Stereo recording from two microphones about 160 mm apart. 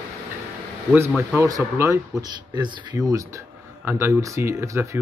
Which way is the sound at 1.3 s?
20° right (ahead or behind).